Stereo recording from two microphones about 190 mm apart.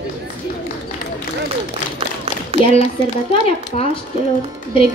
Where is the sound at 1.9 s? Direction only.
30° right (ahead or behind).